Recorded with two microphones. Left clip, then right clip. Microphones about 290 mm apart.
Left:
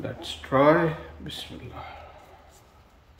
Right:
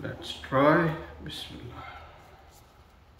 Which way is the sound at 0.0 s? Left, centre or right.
Left.